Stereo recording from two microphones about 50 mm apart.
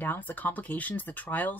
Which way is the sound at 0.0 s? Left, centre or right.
Left.